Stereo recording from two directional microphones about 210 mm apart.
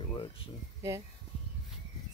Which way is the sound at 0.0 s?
25° left (ahead or behind).